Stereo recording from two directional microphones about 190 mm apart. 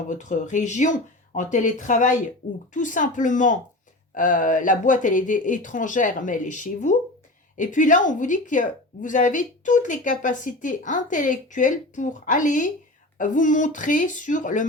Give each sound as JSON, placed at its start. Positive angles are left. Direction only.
{"t": 0.1, "sound": "a woman's voice", "side_deg": 40}